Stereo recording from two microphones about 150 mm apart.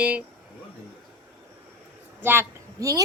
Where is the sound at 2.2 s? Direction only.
15° right (ahead or behind).